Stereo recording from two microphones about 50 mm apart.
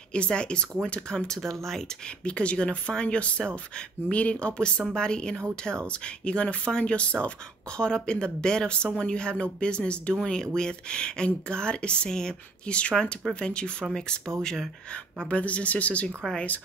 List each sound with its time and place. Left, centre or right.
0.1 s speech: left
2.2 s speech: left
15.2 s speech: left